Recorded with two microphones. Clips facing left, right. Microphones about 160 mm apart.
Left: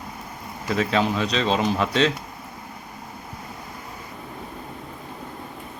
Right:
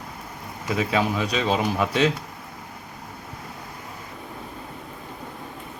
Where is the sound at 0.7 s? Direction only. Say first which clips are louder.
Left 1 dB; 10° right (ahead or behind).